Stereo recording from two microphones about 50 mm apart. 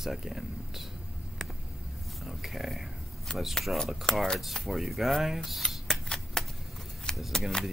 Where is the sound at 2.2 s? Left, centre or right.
Centre.